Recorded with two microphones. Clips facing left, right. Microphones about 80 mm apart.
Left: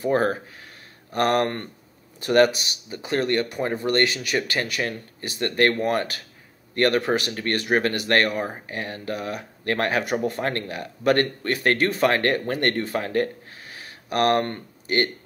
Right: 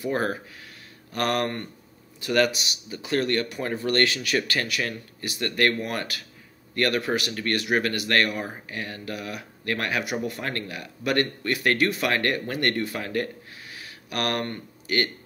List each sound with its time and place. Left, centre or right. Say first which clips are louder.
0.0 s speech: left 5 dB; left